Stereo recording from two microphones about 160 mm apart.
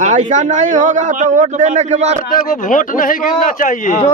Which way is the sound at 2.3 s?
55° left (ahead or behind).